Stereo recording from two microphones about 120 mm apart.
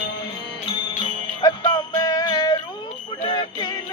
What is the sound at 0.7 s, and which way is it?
Music, 40° left (ahead or behind).